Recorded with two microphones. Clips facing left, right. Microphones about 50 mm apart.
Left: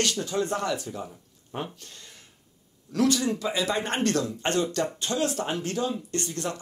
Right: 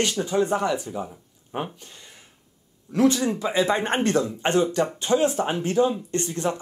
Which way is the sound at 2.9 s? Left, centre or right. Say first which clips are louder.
Right 4 dB; right.